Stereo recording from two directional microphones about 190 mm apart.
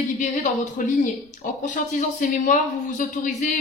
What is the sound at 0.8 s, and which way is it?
Speech, 45° left (ahead or behind).